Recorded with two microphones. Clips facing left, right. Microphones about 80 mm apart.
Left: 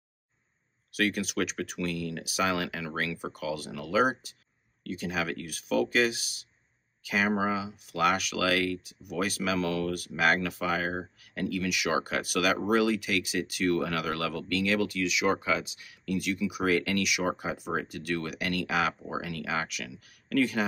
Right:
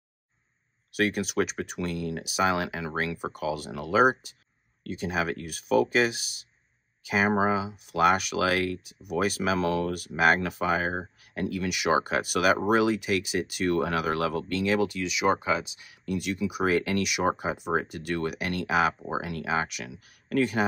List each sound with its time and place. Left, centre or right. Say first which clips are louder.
0.9 s speech: right 3 dB; right
3.2 s speech: right 3 dB; right
11.7 s speech: right 6 dB; right
12.4 s speech: right 3 dB; right
16.2 s speech: right 1 dB; right
16.6 s speech: right 2 dB; right
19.7 s speech: right 1 dB; right
20.1 s speech: right 1 dB; right